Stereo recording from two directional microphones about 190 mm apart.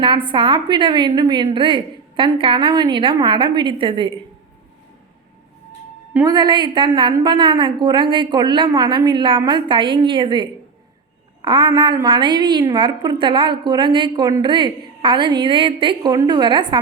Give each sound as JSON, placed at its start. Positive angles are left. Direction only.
{"t": 0.0, "sound": "a woman's voice", "side_deg": -25}
{"t": 6.1, "sound": "a woman's voice", "side_deg": -20}